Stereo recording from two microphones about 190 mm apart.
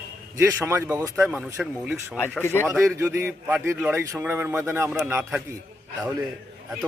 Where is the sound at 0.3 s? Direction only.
15° right (ahead or behind).